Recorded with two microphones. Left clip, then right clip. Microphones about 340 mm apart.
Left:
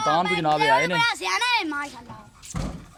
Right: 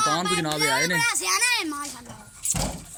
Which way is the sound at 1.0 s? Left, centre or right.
Left.